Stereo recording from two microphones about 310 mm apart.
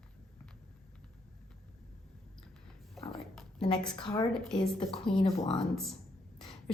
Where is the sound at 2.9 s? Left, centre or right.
Centre.